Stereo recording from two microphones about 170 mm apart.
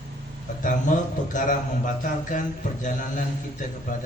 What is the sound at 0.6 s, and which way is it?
A man's voice, 50° left (ahead or behind).